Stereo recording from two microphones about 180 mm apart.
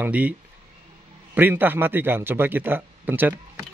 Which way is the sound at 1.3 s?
10° right (ahead or behind).